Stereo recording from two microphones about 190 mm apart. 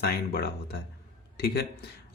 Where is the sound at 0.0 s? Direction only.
55° left (ahead or behind).